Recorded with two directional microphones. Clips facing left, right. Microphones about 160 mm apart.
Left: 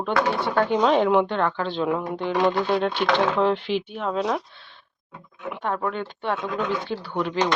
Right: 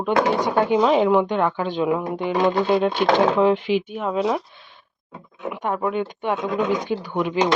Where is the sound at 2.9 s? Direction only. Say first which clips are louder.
Right 4 dB; 45° right (ahead or behind).